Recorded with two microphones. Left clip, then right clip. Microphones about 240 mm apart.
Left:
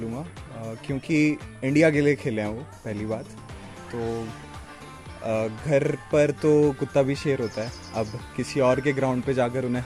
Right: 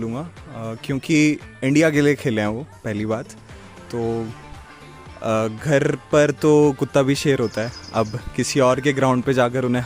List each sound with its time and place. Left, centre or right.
0.1 s speech: right
5.2 s speech: right